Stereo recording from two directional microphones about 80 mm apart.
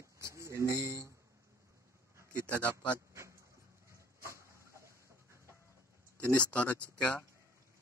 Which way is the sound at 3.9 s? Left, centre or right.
Right.